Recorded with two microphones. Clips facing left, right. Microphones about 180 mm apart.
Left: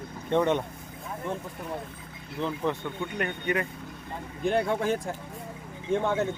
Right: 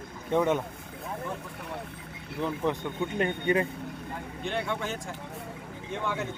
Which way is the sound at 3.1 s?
30° right (ahead or behind).